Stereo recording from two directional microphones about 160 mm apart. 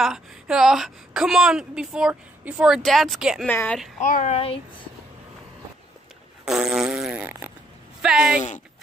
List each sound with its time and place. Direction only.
0.0 s a woman's voice: 5° right (ahead or behind)
3.4 s speech: 10° left (ahead or behind)
4.0 s a woman's voice: 50° left (ahead or behind)
6.4 s fart: 5° right (ahead or behind)
8.0 s a woman's voice: 5° right (ahead or behind)
8.4 s a woman's voice: 50° left (ahead or behind)